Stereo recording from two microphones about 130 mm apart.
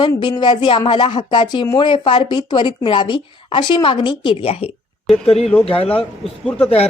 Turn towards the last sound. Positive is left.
turn(degrees=5)  # may be behind; listen again after turning